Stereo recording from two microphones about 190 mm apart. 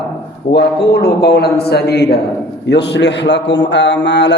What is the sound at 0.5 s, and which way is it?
Speech, 60° left (ahead or behind).